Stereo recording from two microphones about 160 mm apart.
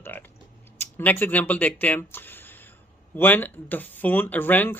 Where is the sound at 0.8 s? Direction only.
15° left (ahead or behind).